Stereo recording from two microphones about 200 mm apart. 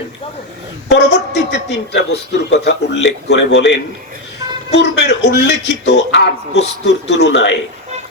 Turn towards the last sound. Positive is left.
turn(degrees=60)  # may be behind; listen again after turning